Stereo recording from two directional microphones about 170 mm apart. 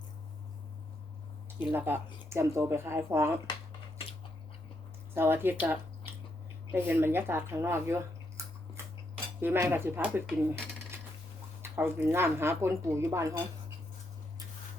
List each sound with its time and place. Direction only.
1.5 s speech: 10° right (ahead or behind)
5.1 s speech: 10° right (ahead or behind)
9.4 s speech: 15° right (ahead or behind)
11.6 s speech: 15° right (ahead or behind)